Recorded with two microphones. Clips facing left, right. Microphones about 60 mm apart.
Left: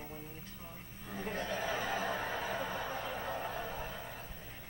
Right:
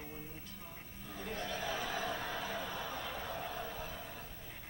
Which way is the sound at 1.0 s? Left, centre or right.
Left.